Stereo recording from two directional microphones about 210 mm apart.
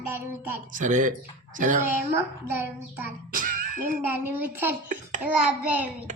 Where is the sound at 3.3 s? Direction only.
40° right (ahead or behind).